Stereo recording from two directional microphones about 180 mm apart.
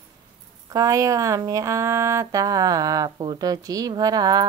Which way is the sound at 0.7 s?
20° right (ahead or behind).